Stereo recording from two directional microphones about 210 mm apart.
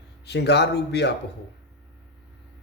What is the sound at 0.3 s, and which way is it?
Speech, 50° left (ahead or behind).